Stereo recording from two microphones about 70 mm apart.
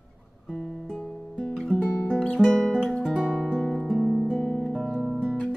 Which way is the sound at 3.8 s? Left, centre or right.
Centre.